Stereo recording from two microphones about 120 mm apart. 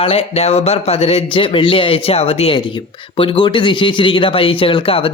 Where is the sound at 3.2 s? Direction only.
45° left (ahead or behind).